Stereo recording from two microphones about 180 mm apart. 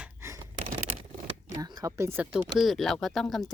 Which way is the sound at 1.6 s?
20° right (ahead or behind).